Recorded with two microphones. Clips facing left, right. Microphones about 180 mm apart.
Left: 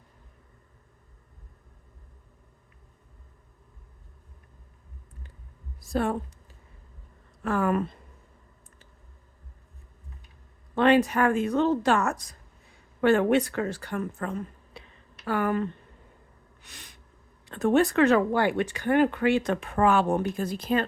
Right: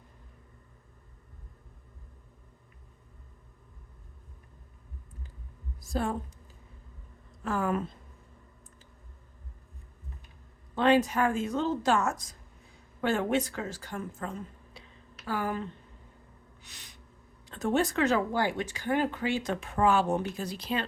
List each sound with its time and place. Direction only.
5.8 s speech: 65° left (ahead or behind)
7.4 s speech: 65° left (ahead or behind)
10.8 s speech: 65° left (ahead or behind)
16.6 s gasp: 55° left (ahead or behind)
17.4 s speech: 60° left (ahead or behind)